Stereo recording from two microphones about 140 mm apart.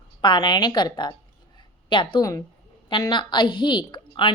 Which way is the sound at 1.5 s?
35° left (ahead or behind).